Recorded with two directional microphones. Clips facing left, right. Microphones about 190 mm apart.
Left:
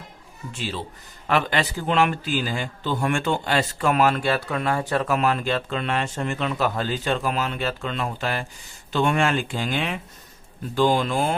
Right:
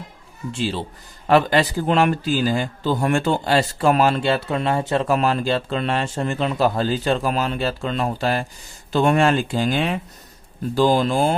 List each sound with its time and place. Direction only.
0.5 s a man's voice: 30° right (ahead or behind)